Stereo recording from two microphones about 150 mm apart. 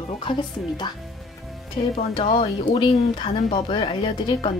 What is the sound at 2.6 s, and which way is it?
Speech, 30° left (ahead or behind).